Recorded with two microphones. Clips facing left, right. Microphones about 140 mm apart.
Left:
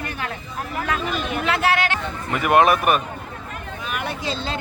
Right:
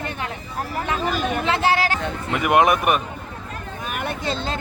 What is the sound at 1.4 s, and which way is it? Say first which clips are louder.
Speech: even; 25° right (ahead or behind).